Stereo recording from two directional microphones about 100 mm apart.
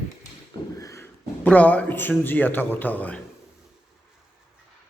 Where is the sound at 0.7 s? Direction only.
30° left (ahead or behind).